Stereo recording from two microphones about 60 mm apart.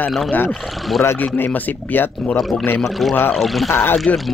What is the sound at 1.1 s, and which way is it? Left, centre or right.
Speech, left.